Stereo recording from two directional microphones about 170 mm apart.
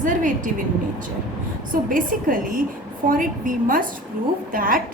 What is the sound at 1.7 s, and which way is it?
A woman's voice, 55° right (ahead or behind).